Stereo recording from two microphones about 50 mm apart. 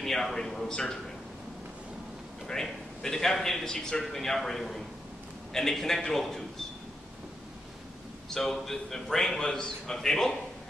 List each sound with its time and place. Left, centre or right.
0.0 s a man's voice: centre
2.4 s a man's voice: centre
8.3 s a man's voice: centre